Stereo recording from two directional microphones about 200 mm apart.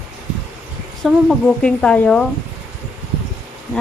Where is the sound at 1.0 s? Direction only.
Centre (ahead or behind).